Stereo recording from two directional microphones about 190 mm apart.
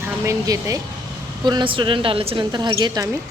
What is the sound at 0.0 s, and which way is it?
Speech, 15° right (ahead or behind).